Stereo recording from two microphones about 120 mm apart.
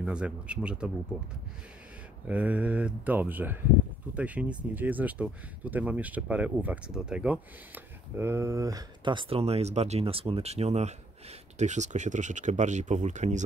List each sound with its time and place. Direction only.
0.0 s speech: 10° right (ahead or behind)
2.2 s speech: 10° right (ahead or behind); by 13.4 s 80° right